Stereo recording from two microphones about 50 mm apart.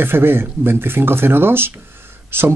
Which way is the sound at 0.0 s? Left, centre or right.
Right.